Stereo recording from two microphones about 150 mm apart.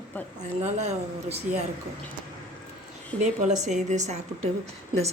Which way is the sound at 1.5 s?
55° right (ahead or behind).